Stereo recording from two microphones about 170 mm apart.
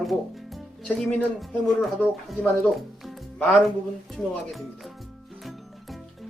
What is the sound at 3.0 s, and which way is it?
Music, centre (ahead or behind).